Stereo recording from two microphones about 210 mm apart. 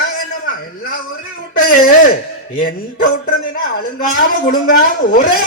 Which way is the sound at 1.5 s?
40° left (ahead or behind).